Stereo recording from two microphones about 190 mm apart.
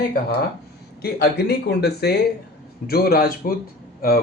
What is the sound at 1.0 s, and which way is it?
Speech, 55° left (ahead or behind).